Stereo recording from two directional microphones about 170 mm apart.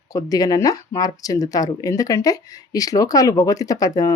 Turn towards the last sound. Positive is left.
turn(degrees=20)  # may be behind; listen again after turning